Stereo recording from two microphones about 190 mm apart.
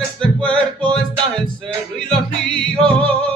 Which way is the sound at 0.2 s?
5° left (ahead or behind).